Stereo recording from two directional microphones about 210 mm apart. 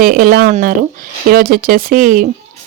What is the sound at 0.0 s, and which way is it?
Speech, 45° right (ahead or behind).